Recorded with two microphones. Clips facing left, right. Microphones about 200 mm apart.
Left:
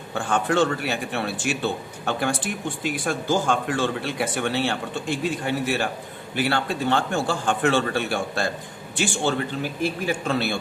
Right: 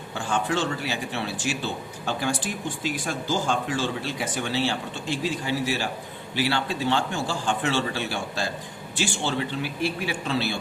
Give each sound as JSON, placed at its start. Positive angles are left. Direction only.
{"t": 0.1, "sound": "a man's voice", "side_deg": 55}